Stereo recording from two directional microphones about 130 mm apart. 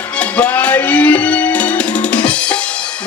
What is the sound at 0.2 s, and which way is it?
Music, 10° left (ahead or behind).